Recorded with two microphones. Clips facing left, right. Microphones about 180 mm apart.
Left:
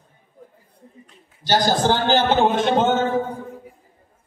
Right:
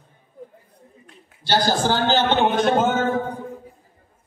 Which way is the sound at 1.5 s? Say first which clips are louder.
Left 2 dB; 15° left (ahead or behind).